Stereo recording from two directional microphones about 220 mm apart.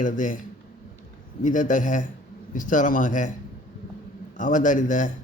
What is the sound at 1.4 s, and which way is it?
A man's voice, 35° left (ahead or behind).